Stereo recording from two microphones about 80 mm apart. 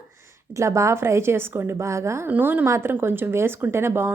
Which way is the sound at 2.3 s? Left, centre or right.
Right.